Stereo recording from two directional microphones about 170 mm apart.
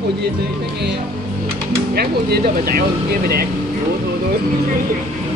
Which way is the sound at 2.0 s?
65° right (ahead or behind).